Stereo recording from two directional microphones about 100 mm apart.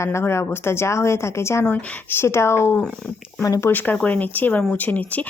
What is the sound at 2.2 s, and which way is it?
Speech, 25° left (ahead or behind).